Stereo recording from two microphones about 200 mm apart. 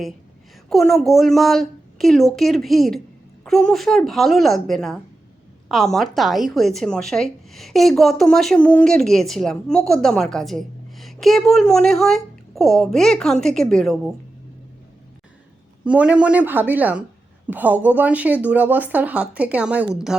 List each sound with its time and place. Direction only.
0.7 s speech: centre (ahead or behind)
15.8 s speech: 5° right (ahead or behind)